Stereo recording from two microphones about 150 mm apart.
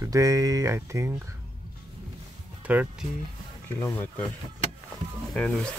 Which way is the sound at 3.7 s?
15° left (ahead or behind).